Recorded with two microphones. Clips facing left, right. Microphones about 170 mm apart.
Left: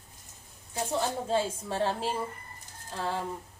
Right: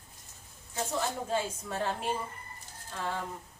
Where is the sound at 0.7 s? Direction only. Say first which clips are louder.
Left 3 dB; 30° left (ahead or behind).